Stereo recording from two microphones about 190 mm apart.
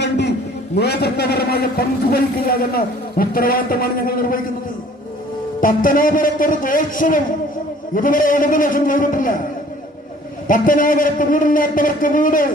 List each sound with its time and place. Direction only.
0.0 s a sound: 65° left (ahead or behind)
0.8 s a man's voice: 60° left (ahead or behind)
5.5 s a man's voice: 45° left (ahead or behind)
10.4 s a man's voice: 45° left (ahead or behind)